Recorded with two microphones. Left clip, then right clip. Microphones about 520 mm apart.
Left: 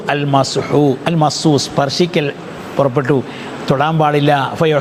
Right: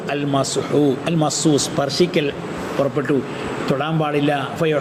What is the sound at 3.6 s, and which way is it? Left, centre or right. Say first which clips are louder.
Speech: left 8 dB; left.